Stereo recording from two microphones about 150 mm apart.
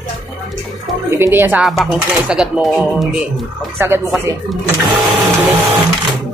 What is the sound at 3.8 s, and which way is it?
Speech, 15° right (ahead or behind).